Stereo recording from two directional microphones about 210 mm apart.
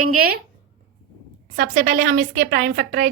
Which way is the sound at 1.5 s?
40° right (ahead or behind).